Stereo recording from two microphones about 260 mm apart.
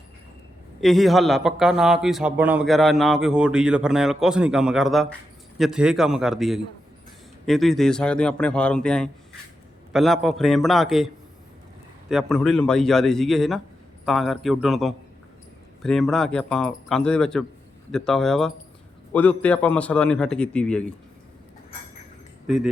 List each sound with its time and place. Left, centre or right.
0.8 s a man's voice: centre
22.4 s a man's voice: centre